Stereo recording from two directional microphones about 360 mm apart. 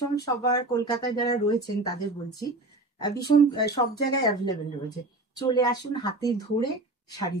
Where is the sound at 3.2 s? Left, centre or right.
Left.